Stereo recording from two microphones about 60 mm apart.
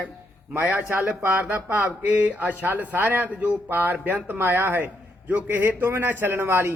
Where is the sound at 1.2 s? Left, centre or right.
Right.